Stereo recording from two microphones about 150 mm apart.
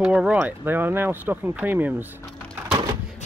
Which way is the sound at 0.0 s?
5° right (ahead or behind).